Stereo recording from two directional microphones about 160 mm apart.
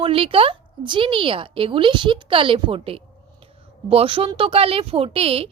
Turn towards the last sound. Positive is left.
turn(degrees=-35)  # may be behind; listen again after turning